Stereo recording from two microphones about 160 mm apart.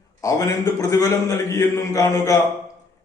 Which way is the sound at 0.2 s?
20° left (ahead or behind).